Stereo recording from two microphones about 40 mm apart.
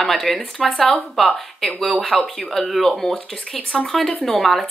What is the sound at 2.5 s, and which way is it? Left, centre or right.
Speech, centre.